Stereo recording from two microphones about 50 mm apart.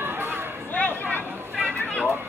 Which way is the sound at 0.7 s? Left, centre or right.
Left.